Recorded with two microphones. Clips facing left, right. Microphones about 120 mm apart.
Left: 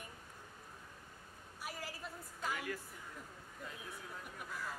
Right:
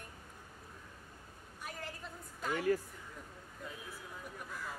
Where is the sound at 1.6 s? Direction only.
5° left (ahead or behind).